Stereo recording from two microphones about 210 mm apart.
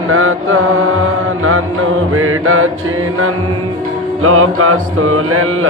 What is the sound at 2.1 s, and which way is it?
Mantra, 85° right.